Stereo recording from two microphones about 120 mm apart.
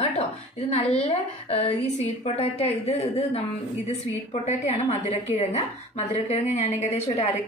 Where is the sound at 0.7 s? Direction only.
60° left (ahead or behind).